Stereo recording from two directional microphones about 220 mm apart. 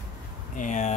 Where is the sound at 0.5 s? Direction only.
35° left (ahead or behind).